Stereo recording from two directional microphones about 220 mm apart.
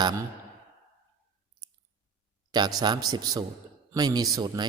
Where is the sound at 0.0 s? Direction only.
20° right (ahead or behind).